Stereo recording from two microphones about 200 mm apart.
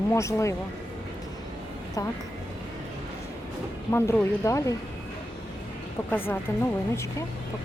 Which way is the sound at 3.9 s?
10° left (ahead or behind).